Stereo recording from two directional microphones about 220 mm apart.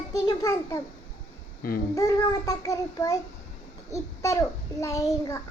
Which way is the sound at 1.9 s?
15° left (ahead or behind).